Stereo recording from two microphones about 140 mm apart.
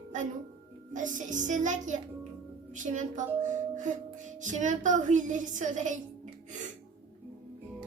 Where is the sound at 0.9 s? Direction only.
65° right (ahead or behind).